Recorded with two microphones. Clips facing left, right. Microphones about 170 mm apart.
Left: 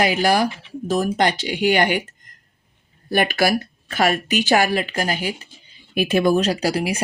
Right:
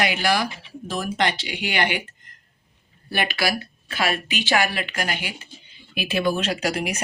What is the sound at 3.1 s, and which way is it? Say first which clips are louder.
Speech: left 6 dB; 45° left (ahead or behind).